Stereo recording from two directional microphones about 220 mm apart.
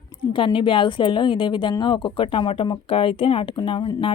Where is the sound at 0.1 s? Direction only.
20° left (ahead or behind).